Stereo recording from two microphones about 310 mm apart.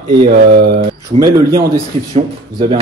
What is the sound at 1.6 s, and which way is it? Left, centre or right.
Speech, right.